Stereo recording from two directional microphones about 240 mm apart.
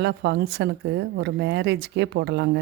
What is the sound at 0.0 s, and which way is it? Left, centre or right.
Speech, right.